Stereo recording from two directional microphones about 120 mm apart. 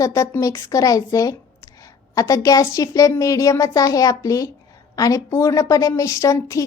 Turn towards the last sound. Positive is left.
turn(degrees=25)  # may be behind; listen again after turning